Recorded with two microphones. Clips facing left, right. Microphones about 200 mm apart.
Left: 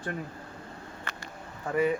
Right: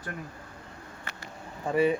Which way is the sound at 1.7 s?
25° right (ahead or behind).